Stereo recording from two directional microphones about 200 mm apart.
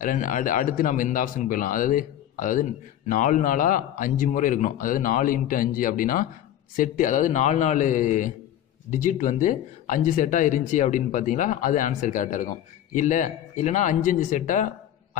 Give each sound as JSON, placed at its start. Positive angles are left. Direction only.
{"t": 0.0, "sound": "speech", "side_deg": 40}